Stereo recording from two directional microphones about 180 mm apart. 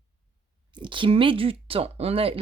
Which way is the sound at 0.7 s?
25° right (ahead or behind).